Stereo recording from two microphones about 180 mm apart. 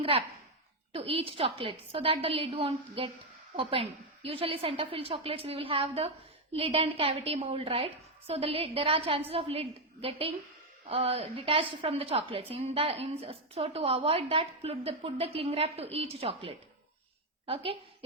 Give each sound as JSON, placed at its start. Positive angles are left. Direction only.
{"t": 0.0, "sound": "a woman's voice", "side_deg": -35}